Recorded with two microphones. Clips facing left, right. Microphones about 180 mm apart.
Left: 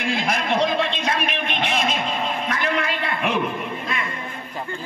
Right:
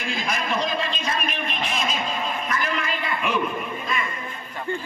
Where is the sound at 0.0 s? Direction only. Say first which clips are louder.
Left 4 dB; 70° left (ahead or behind).